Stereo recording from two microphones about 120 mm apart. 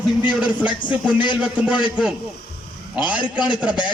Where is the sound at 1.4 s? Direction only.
5° right (ahead or behind).